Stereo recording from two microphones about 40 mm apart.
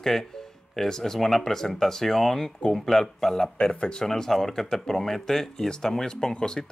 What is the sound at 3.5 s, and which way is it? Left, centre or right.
Speech, left.